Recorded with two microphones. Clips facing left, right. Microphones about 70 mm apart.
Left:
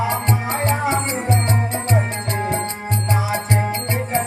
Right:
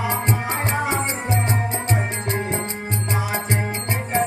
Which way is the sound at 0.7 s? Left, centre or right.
Right.